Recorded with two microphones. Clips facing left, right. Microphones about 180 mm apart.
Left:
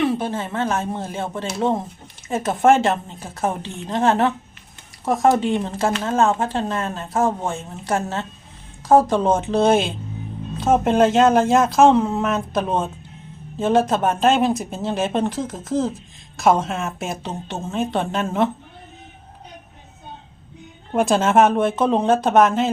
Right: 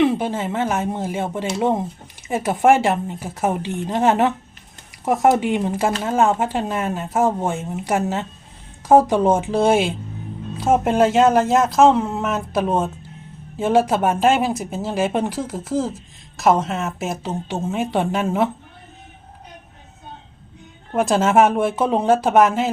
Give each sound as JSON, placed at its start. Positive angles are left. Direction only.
{"t": 0.0, "sound": "speech", "side_deg": -15}
{"t": 20.9, "sound": "speech", "side_deg": 0}